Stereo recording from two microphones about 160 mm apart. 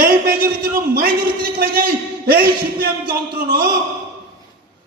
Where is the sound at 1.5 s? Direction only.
70° right (ahead or behind).